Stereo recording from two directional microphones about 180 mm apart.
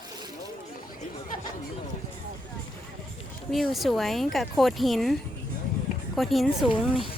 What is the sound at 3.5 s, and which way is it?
Speech, centre (ahead or behind).